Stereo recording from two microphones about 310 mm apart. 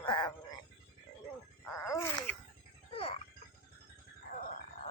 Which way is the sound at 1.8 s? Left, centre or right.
Centre.